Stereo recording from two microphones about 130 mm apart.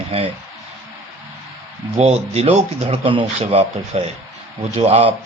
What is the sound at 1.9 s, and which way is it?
Speech, 55° right (ahead or behind).